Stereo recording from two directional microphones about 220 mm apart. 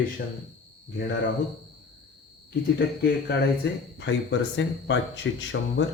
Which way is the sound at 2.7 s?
45° left (ahead or behind).